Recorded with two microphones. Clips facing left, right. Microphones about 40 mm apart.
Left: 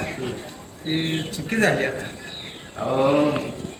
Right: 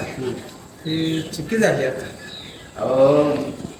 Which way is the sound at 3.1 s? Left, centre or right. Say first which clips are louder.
Right 3 dB; left.